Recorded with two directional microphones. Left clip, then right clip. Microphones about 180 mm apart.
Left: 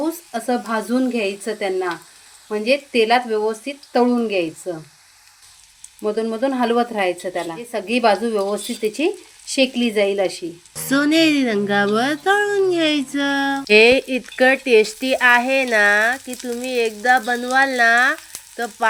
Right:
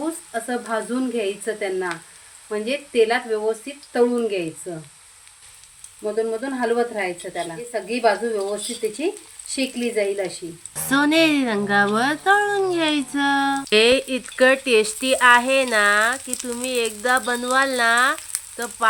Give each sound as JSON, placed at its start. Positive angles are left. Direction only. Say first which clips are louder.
{"t": 0.3, "sound": "speech", "louder": "left 3 dB", "side_deg": 45}
{"t": 6.0, "sound": "speech", "louder": "left 3 dB", "side_deg": 45}
{"t": 10.8, "sound": "speech", "louder": "left 1 dB", "side_deg": 5}